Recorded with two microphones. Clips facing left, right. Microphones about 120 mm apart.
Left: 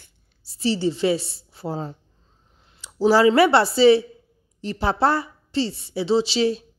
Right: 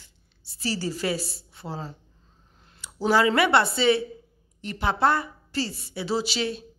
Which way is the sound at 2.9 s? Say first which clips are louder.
Left 6 dB; 30° left (ahead or behind).